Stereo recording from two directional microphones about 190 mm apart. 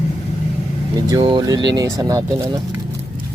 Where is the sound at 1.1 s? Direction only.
25° right (ahead or behind).